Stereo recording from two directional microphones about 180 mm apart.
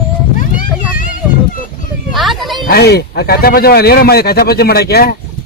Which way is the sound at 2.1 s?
Centre (ahead or behind).